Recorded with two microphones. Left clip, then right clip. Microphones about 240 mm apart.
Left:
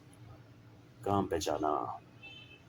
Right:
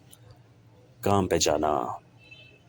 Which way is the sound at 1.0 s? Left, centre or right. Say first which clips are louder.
Right 8 dB; right.